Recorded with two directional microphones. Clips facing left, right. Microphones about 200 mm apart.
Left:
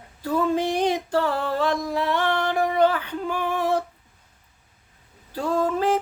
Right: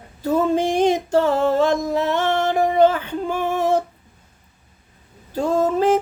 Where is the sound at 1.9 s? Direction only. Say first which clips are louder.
Right 4 dB; 25° right (ahead or behind).